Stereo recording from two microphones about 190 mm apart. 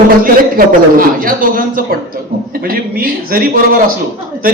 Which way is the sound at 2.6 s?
50° right (ahead or behind).